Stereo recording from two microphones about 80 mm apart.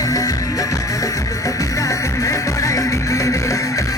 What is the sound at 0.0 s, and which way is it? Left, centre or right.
Music, left.